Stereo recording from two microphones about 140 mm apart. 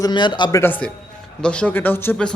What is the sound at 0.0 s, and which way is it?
Speech, 35° left (ahead or behind).